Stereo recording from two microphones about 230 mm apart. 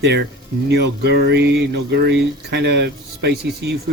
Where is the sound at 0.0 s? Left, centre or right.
Right.